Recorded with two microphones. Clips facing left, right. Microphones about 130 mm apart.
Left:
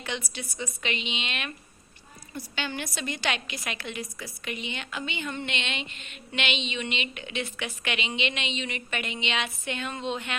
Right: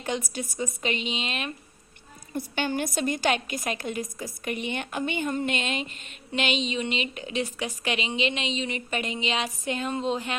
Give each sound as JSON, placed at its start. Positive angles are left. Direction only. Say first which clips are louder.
{"t": 0.0, "sound": "a woman's voice", "louder": "right 5 dB", "side_deg": -45}
{"t": 2.3, "sound": "a woman's voice", "louder": "right 6 dB", "side_deg": -50}